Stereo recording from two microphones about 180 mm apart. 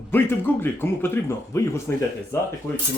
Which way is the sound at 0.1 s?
10° left (ahead or behind).